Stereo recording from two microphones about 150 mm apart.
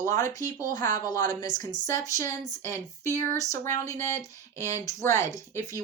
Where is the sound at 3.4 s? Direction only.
20° left (ahead or behind).